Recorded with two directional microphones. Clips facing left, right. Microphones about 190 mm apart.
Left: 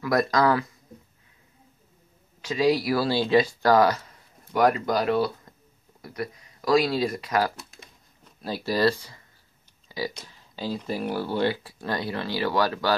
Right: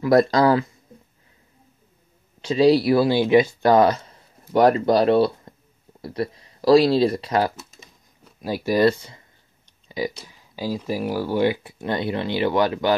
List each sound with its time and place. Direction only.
0.0 s speech: 30° right (ahead or behind)
2.4 s speech: 30° right (ahead or behind)
8.2 s speech: 15° right (ahead or behind)
9.8 s clicking: 20° right (ahead or behind)
10.1 s speech: 10° right (ahead or behind)